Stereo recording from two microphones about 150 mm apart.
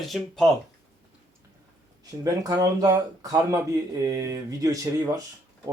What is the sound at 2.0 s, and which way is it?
Speech, 25° right (ahead or behind).